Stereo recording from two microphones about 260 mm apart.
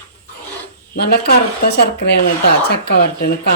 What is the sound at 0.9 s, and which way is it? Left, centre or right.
A woman's voice, left.